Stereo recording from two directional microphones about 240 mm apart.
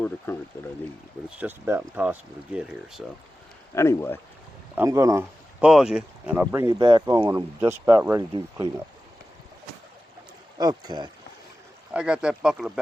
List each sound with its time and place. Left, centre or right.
0.3 s speech: centre
1.4 s speech: centre
3.8 s speech: centre
4.7 s speech: centre
10.6 s speech: centre
11.9 s speech: centre